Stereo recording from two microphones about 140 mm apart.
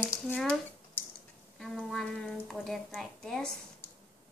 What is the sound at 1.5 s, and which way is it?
A woman's voice, centre (ahead or behind).